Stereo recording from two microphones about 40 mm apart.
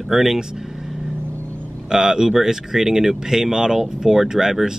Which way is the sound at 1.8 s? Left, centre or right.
Centre.